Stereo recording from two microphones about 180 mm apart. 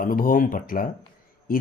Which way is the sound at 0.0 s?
50° left (ahead or behind).